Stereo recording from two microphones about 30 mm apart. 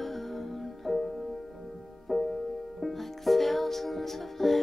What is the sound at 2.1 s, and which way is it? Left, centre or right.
Music, centre.